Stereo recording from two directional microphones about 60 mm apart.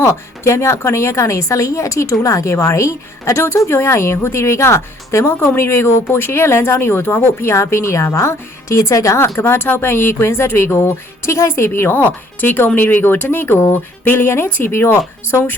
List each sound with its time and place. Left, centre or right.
0.0 s speech: left
9.4 s speech: left